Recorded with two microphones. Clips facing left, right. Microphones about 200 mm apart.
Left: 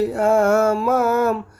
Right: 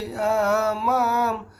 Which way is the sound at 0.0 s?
50° left (ahead or behind).